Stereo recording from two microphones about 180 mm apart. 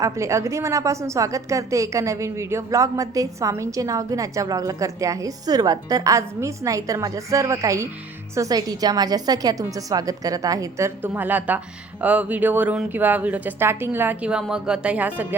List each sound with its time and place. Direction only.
0.0 s a woman's voice: 15° right (ahead or behind)